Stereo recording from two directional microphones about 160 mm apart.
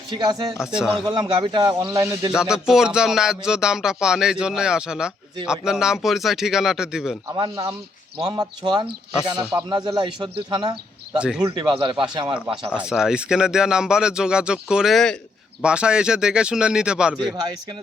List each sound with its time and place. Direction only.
0.1 s a man's voice: 30° right (ahead or behind)
0.6 s speech: 5° right (ahead or behind)
1.0 s a man's voice: 30° right (ahead or behind)
2.3 s speech: 5° right (ahead or behind)
7.3 s a man's voice: 25° right (ahead or behind)
11.2 s speech: 5° right (ahead or behind)
11.4 s a man's voice: 25° right (ahead or behind)
12.7 s speech: 5° right (ahead or behind)